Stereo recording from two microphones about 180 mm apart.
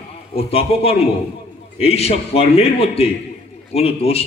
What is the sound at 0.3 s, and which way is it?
A man's voice, 35° left (ahead or behind).